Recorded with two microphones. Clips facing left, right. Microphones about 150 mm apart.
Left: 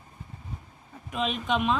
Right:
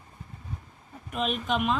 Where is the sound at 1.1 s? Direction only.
Centre (ahead or behind).